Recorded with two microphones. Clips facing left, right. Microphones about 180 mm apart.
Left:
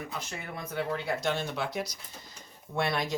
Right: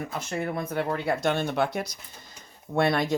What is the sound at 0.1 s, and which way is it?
Speech, 55° right (ahead or behind).